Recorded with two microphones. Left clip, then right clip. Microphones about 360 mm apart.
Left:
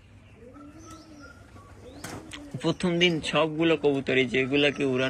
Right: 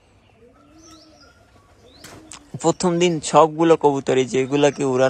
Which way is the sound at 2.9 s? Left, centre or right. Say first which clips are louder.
Right 4 dB; right.